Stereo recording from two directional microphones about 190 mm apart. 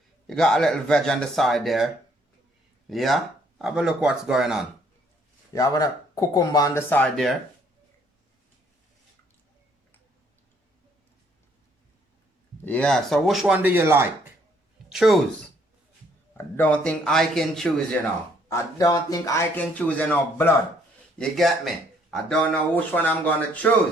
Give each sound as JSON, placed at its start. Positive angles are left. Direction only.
{"t": 0.3, "sound": "speech", "side_deg": 0}
{"t": 2.9, "sound": "speech", "side_deg": 0}
{"t": 5.5, "sound": "speech", "side_deg": 20}
{"t": 12.6, "sound": "speech", "side_deg": 5}
{"t": 14.8, "sound": "speech", "side_deg": 0}
{"t": 16.4, "sound": "speech", "side_deg": 10}
{"t": 18.4, "sound": "speech", "side_deg": 15}